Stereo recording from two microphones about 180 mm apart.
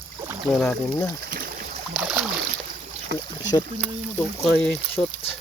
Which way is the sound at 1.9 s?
10° right (ahead or behind).